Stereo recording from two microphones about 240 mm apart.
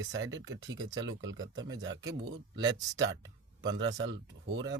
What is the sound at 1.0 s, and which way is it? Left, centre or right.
Speech, right.